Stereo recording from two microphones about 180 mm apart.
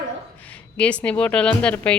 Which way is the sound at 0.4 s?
5° left (ahead or behind).